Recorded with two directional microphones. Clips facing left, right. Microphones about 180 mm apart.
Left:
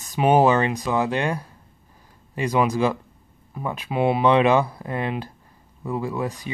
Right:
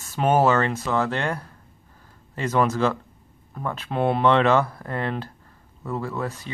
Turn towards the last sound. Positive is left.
turn(degrees=15)  # may be behind; listen again after turning